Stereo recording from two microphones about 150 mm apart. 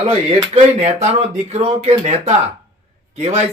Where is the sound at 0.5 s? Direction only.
45° right (ahead or behind).